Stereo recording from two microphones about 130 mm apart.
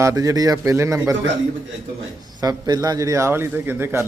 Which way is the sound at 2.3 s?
30° right (ahead or behind).